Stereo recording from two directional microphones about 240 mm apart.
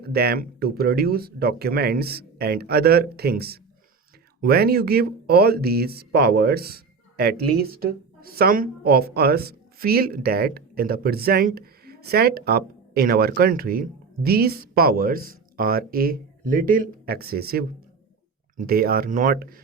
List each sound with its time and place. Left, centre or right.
0.0 s speech: right